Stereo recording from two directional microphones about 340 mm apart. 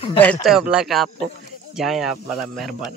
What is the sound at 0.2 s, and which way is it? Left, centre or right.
Speech, centre.